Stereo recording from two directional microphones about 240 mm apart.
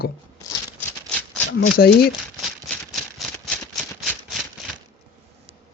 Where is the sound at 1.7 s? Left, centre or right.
Left.